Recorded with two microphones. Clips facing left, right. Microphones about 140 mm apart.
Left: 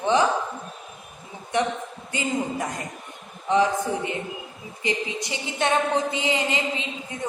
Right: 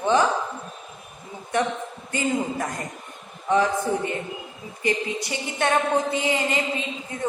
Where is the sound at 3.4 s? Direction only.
20° left (ahead or behind).